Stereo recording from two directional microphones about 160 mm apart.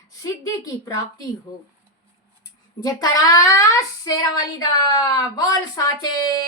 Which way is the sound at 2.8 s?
25° left (ahead or behind).